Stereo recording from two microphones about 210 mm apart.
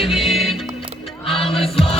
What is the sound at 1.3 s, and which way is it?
Music, 25° left (ahead or behind).